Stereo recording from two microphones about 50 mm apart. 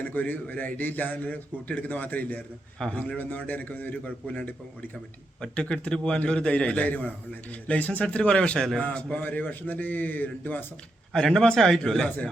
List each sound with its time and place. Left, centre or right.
0.0 s a man's voice: left
2.8 s speech: centre
3.2 s a man's voice: left
5.4 s a man's voice: centre
8.8 s a man's voice: left
11.1 s speech: centre